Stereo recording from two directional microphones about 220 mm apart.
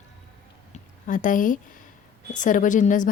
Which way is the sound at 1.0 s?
35° left (ahead or behind).